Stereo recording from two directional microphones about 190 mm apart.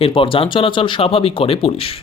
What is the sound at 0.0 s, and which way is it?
Speech, 30° left (ahead or behind).